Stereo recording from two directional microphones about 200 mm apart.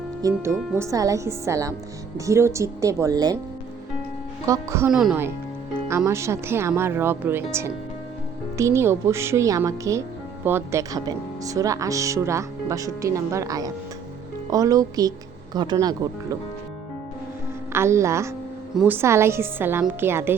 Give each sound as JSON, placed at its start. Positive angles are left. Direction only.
{"t": 0.2, "sound": "speech", "side_deg": -15}
{"t": 4.4, "sound": "speech", "side_deg": -15}
{"t": 4.9, "sound": "speech", "side_deg": 0}
{"t": 17.7, "sound": "speech", "side_deg": -15}